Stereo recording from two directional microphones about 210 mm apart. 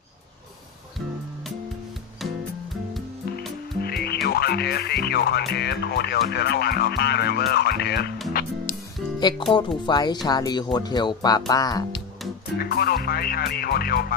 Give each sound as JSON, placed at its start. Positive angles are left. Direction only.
{"t": 2.2, "sound": "music", "side_deg": 0}
{"t": 3.8, "sound": "music", "side_deg": 50}
{"t": 5.5, "sound": "speech", "side_deg": 50}
{"t": 8.3, "sound": "music", "side_deg": 45}
{"t": 9.5, "sound": "speech", "side_deg": 20}
{"t": 12.5, "sound": "speech", "side_deg": 45}